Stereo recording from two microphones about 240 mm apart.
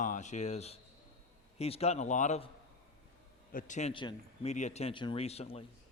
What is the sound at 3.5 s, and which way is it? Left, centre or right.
A man's voice, left.